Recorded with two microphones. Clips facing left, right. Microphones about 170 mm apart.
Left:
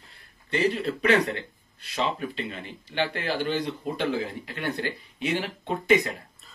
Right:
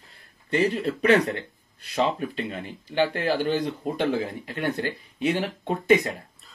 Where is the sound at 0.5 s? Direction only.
30° right (ahead or behind).